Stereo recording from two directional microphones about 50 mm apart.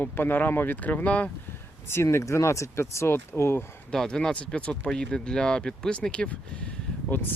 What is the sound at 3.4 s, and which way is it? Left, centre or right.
Speech, left.